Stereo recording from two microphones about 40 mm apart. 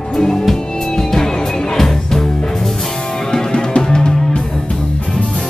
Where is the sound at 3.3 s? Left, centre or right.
Centre.